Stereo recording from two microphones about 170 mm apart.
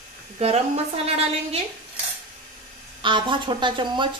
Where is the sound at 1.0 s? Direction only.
35° right (ahead or behind).